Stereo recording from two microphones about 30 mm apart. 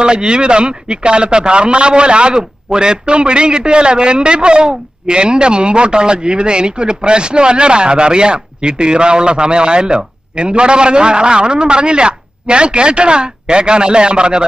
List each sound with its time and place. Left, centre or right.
0.0 s a man's voice: right